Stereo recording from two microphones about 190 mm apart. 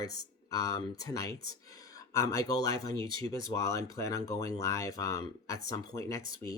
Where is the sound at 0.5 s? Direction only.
15° left (ahead or behind).